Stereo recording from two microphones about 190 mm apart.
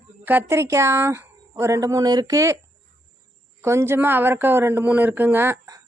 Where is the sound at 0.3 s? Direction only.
10° right (ahead or behind).